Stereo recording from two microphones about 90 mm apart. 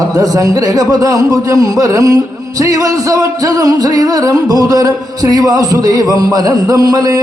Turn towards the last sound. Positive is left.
turn(degrees=-45)  # may be behind; listen again after turning